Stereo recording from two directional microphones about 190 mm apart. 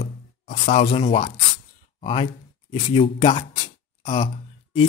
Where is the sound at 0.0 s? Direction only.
35° left (ahead or behind).